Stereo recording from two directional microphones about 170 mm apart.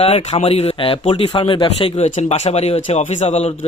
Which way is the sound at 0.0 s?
40° left (ahead or behind).